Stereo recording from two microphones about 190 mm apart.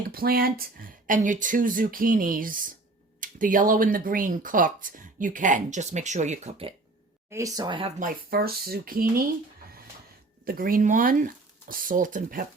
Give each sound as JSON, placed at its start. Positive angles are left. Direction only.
{"t": 0.1, "sound": "speech", "side_deg": -50}
{"t": 7.3, "sound": "speech", "side_deg": -15}
{"t": 7.9, "sound": "speech", "side_deg": -50}
{"t": 10.4, "sound": "speech", "side_deg": -50}